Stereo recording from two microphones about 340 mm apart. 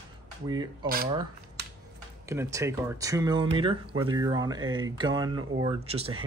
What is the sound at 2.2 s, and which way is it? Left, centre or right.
Speech, centre.